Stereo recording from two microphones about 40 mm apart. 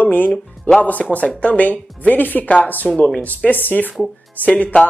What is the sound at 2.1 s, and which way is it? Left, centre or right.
Speech, left.